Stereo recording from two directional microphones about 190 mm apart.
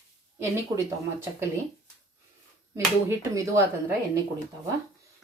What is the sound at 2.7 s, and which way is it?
Speech, 15° right (ahead or behind).